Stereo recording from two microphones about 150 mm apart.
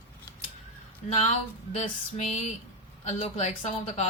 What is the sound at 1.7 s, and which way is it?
Speech, 45° left (ahead or behind).